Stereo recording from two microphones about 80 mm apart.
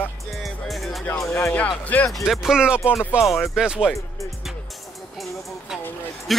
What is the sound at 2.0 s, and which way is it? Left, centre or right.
Speech, centre.